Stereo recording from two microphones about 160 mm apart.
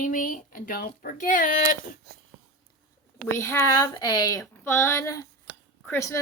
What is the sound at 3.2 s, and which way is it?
Speech, 15° left (ahead or behind).